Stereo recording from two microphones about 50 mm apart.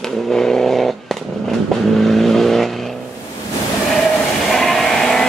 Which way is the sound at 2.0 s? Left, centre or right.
Centre.